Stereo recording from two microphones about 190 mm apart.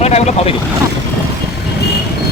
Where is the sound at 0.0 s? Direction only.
35° left (ahead or behind).